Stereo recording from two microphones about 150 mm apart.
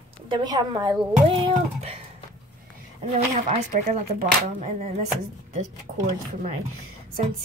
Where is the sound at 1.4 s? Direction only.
40° right (ahead or behind).